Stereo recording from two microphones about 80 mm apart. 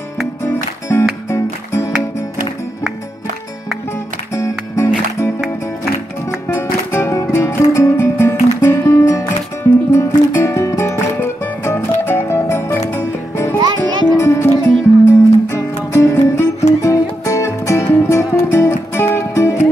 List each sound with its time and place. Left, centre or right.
0.5 s music: left
4.4 s music: left
6.5 s music: left